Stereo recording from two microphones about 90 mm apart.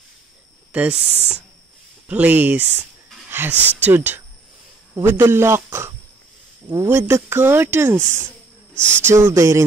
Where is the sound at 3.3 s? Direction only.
25° right (ahead or behind).